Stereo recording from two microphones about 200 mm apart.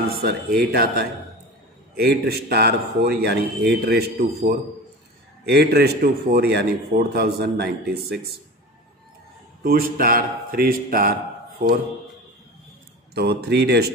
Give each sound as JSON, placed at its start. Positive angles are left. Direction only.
{"t": 0.1, "sound": "a man's voice", "side_deg": -50}
{"t": 9.6, "sound": "a man's voice", "side_deg": -45}
{"t": 13.1, "sound": "speech", "side_deg": -55}